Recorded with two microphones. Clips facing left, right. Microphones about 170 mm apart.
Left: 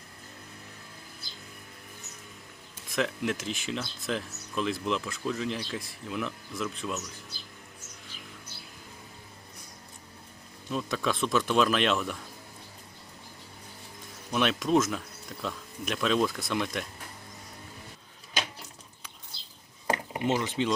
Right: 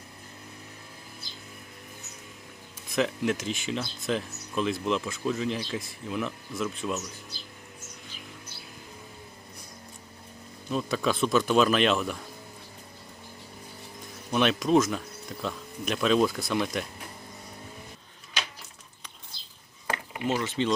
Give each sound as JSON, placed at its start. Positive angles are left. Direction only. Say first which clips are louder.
{"t": 2.9, "sound": "speech", "louder": "right 3 dB", "side_deg": 0}
{"t": 10.7, "sound": "speech", "louder": "right 3 dB", "side_deg": 0}
{"t": 14.3, "sound": "speech", "louder": "right 3 dB", "side_deg": 0}
{"t": 20.2, "sound": "speech", "louder": "even", "side_deg": 20}